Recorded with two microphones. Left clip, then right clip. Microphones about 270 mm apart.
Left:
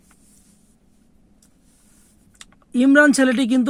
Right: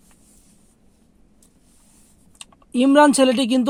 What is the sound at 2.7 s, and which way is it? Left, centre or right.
Speech, right.